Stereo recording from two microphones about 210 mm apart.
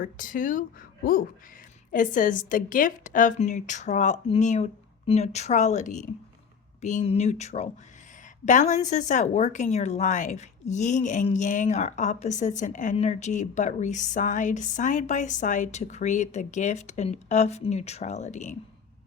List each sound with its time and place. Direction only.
0.0 s speech: 40° left (ahead or behind)
1.9 s speech: 40° left (ahead or behind)